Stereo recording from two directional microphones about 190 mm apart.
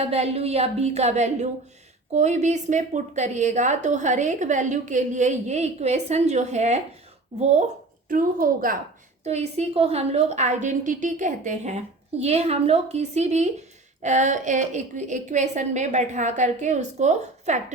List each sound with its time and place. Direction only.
0.1 s a woman's voice: 35° right (ahead or behind); by 8.8 s 50° right (ahead or behind)
9.2 s a woman's voice: 35° right (ahead or behind)